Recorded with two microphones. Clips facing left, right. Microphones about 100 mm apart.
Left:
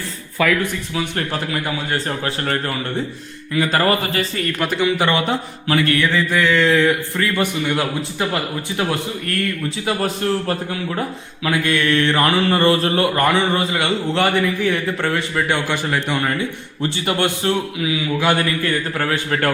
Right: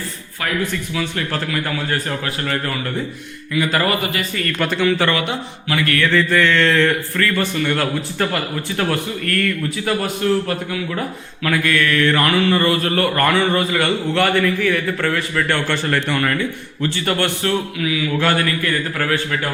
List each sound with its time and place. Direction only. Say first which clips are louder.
1.3 s a man's voice: even; 20° left (ahead or behind)
4.6 s mantra: right 1 dB; 10° left (ahead or behind)
5.2 s speech: left 3 dB; 35° left (ahead or behind)
6.1 s mantra: right 2 dB; 10° left (ahead or behind)
7.2 s speech: right 1 dB; 15° left (ahead or behind)
15.4 s mantra: right 1 dB; 15° left (ahead or behind)
16.8 s speech: even; 20° left (ahead or behind)
18.2 s mantra: left 1 dB; 15° left (ahead or behind)
18.6 s speech: even; 25° left (ahead or behind)